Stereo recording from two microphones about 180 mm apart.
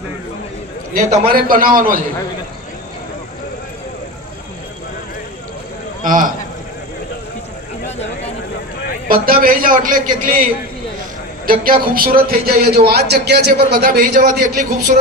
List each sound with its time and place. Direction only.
0.9 s speech: 50° right (ahead or behind)
6.0 s a man's voice: 45° right (ahead or behind)
9.0 s speech: 50° right (ahead or behind)
11.6 s speech: 50° right (ahead or behind)